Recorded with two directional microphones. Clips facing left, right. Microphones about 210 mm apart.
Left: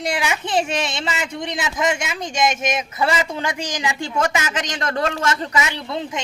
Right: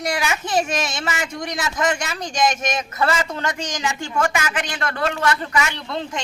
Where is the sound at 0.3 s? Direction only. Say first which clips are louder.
Even; 15° left (ahead or behind).